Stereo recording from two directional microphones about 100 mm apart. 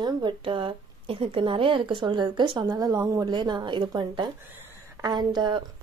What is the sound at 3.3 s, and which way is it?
A woman's voice, 45° right (ahead or behind).